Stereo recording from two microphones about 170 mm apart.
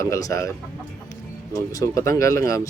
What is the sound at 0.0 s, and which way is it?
Speech, 20° left (ahead or behind).